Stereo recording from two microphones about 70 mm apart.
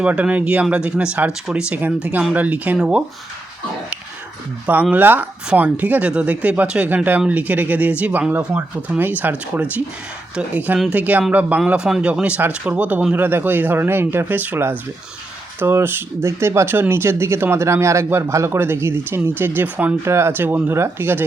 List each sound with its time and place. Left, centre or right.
0.0 s speech: centre
1.3 s speech: centre
2.3 s speech: right
2.7 s speech: centre
4.6 s speech: right
20.1 s speech: right